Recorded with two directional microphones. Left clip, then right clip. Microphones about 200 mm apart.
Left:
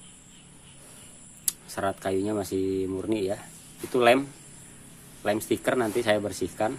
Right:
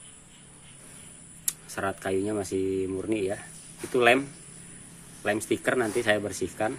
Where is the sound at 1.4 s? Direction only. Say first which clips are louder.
Left 2 dB; 15° left (ahead or behind).